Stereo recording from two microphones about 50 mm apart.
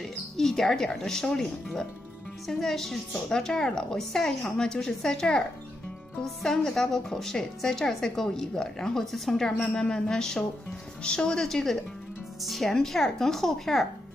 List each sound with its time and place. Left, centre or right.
0.0 s a woman's voice: centre
9.6 s a woman's voice: centre
11.4 s speech: centre